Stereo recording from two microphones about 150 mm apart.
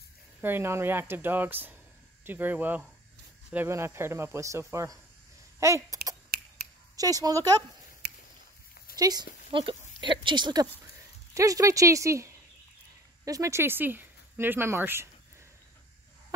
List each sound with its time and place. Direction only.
0.4 s speech: 15° right (ahead or behind)
7.0 s speech: 25° right (ahead or behind)
8.9 s speech: 25° right (ahead or behind)